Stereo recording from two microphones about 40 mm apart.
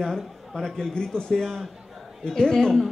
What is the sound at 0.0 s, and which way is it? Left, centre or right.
A man's voice, centre.